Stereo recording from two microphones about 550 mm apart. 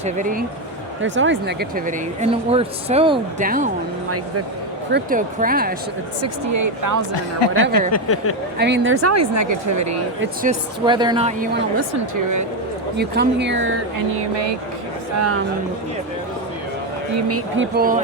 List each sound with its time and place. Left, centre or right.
0.0 s speech: centre
4.9 s speech: centre
6.2 s speech: right
7.1 s speech: left
7.7 s speech: left
8.5 s speech: centre
10.8 s speech: centre
13.0 s speech: centre
14.2 s speech: right
17.2 s speech: right